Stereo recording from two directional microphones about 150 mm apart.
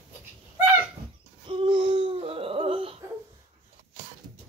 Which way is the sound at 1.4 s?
35° right (ahead or behind).